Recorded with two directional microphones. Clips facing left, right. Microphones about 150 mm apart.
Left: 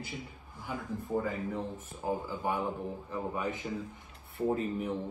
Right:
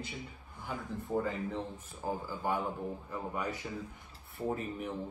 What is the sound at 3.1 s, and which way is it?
Speech, 20° left (ahead or behind).